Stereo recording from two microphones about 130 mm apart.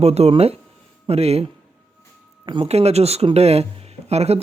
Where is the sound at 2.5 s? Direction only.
50° right (ahead or behind).